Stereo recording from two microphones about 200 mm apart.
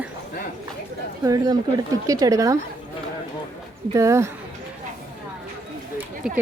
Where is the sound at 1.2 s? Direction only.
15° right (ahead or behind).